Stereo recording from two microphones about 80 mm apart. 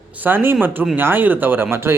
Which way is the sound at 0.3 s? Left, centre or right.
Right.